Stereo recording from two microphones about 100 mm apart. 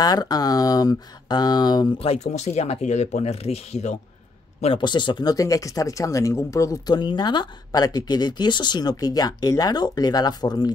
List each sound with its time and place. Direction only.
0.0 s speech: 40° left (ahead or behind)
2.0 s speech: 90° left
4.7 s speech: 50° left (ahead or behind); by 6.8 s 30° left (ahead or behind)
6.9 s speech: 50° left (ahead or behind)